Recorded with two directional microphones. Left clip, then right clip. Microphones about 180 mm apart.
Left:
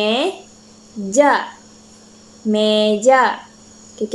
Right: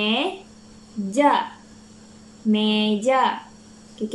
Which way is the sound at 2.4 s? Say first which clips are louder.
Left 7 dB; 10° right (ahead or behind).